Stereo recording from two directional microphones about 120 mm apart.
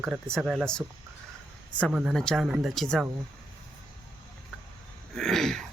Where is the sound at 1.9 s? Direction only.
Centre (ahead or behind).